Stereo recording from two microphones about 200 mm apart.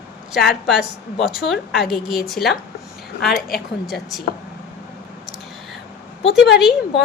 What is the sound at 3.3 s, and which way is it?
Speech, 50° left (ahead or behind).